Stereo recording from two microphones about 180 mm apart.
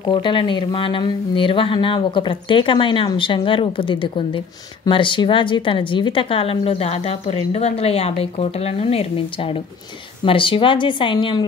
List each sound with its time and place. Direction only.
0.0 s a woman's voice: 25° left (ahead or behind)